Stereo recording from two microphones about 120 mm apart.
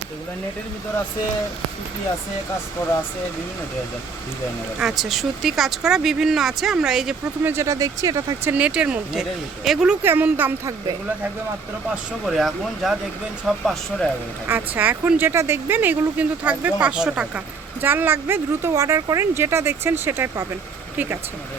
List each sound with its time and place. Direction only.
4.8 s speech: 5° right (ahead or behind)
7.4 s speech: 20° right (ahead or behind)
8.5 s speech: 10° right (ahead or behind)
10.0 s speech: 15° right (ahead or behind)
12.2 s speech: centre (ahead or behind)
14.4 s speech: 15° right (ahead or behind)